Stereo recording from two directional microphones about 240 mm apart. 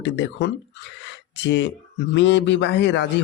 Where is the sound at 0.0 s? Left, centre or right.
Left.